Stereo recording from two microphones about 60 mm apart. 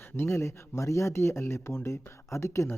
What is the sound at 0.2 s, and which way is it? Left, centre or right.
Speech, left.